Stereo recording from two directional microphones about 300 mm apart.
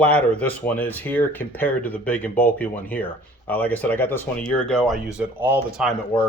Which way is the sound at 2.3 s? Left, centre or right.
Left.